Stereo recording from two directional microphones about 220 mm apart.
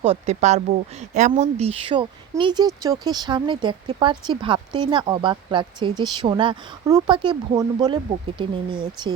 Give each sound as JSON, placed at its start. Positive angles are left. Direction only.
{"t": 0.0, "sound": "speech", "side_deg": -30}